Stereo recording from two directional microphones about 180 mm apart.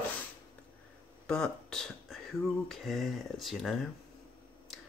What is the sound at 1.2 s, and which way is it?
Speech, 5° left (ahead or behind).